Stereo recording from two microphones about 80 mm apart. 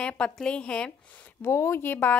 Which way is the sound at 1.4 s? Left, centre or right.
Left.